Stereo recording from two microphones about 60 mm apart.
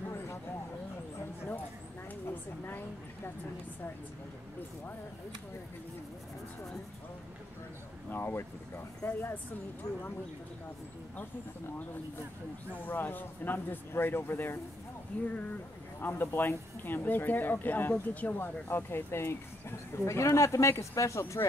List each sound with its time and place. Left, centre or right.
2.2 s a sound: left
8.1 s speech: left
12.7 s speech: left
15.2 s speech: left
19.9 s speech: left